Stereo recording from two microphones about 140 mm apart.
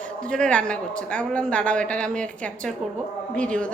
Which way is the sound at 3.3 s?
10° left (ahead or behind).